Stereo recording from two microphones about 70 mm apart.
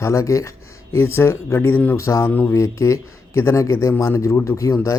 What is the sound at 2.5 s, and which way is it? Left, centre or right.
Speech, left.